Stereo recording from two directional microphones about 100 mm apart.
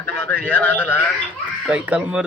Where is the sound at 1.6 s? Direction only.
10° right (ahead or behind).